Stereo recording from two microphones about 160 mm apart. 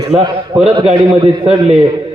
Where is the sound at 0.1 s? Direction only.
40° right (ahead or behind).